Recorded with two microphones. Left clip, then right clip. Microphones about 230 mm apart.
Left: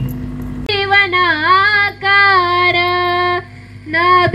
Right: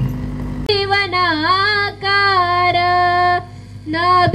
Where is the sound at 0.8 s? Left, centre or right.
Right.